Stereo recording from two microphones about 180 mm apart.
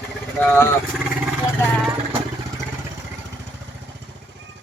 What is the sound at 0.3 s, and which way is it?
Speech, 10° left (ahead or behind).